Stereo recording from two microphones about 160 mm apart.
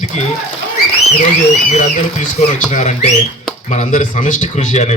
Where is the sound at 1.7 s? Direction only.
45° left (ahead or behind).